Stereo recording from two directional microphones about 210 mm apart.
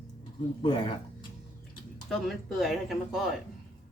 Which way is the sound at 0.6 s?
25° left (ahead or behind).